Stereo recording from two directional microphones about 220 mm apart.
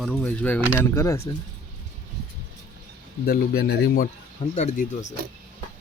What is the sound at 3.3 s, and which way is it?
Speech, 45° left (ahead or behind).